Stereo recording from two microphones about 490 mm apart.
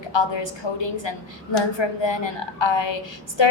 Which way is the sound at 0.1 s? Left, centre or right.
Left.